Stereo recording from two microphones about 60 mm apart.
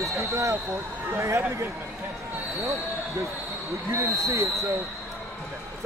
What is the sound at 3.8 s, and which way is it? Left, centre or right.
Speech, right.